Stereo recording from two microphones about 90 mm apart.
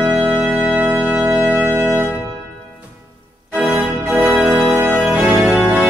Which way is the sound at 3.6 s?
15° right (ahead or behind).